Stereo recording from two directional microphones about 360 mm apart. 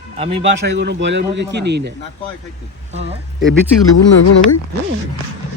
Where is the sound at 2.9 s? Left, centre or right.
Centre.